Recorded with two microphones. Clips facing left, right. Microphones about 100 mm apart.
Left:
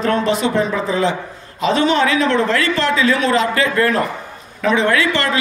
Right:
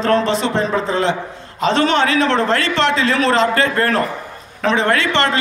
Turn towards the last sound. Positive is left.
turn(degrees=-30)  # may be behind; listen again after turning